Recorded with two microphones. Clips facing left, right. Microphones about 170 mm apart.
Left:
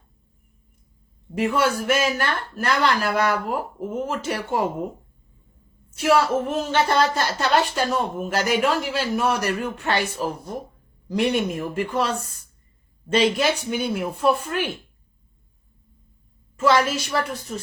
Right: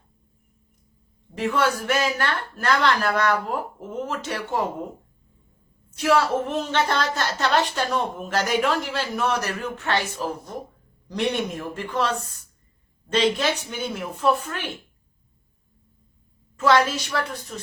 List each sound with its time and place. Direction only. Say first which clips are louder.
1.4 s a woman's voice: left 2 dB; 10° left (ahead or behind)
6.0 s a woman's voice: left 1 dB; 5° left (ahead or behind)
13.1 s a woman's voice: left 2 dB; 10° left (ahead or behind)
16.6 s a woman's voice: even; 10° left (ahead or behind)